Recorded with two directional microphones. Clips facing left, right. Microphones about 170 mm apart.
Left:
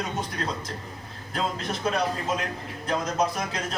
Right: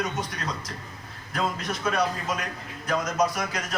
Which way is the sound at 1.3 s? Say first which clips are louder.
Even; 30° left (ahead or behind).